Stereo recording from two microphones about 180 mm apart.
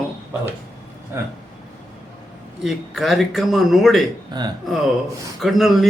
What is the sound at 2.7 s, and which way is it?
A man's voice, centre (ahead or behind).